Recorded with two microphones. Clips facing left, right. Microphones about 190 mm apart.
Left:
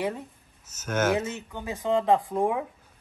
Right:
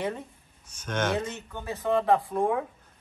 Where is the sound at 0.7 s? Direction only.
5° left (ahead or behind).